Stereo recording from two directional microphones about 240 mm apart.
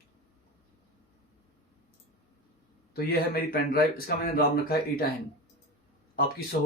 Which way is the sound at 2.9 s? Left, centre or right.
Left.